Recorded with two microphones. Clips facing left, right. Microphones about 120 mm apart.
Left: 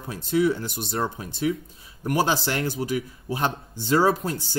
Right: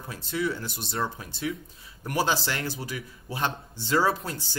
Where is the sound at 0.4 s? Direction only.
20° left (ahead or behind).